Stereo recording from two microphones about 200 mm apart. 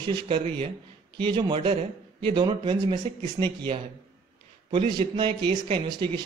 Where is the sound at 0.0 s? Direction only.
25° right (ahead or behind).